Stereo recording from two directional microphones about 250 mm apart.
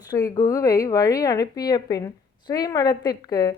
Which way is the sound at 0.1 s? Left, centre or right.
Centre.